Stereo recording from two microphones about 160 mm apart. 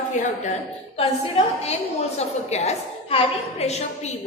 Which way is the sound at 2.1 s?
40° left (ahead or behind).